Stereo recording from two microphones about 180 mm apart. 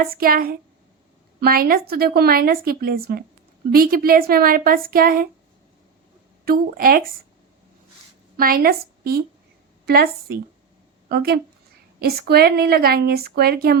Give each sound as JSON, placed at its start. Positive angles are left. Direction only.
{"t": 0.0, "sound": "a woman's voice", "side_deg": -55}
{"t": 6.4, "sound": "a woman's voice", "side_deg": -55}
{"t": 8.4, "sound": "a woman's voice", "side_deg": -55}